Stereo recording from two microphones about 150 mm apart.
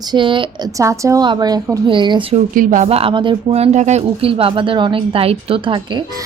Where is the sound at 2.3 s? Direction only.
60° right (ahead or behind).